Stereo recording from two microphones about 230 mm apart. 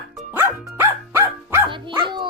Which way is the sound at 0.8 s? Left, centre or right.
Centre.